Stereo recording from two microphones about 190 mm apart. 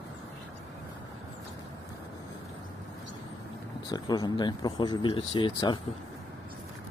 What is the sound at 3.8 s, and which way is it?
Speech, 20° left (ahead or behind).